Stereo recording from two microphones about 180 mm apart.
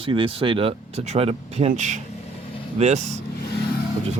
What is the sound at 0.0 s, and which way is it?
Speech, 30° right (ahead or behind).